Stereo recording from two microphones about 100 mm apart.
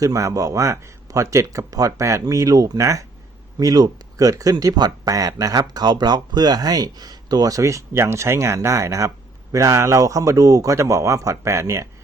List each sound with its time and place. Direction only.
0.0 s speech: 30° right (ahead or behind)